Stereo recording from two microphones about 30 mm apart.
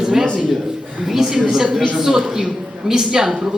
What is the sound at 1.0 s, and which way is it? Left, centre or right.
A man's voice, centre.